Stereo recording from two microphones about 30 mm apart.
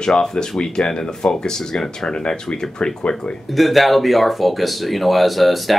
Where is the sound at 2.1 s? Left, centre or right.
Left.